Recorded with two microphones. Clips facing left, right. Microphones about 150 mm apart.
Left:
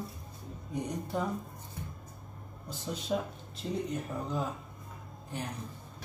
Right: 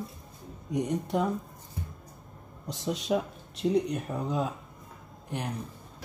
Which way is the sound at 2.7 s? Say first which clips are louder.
Right 5 dB; 90° right.